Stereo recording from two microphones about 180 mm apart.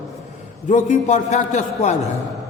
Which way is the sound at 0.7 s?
40° left (ahead or behind).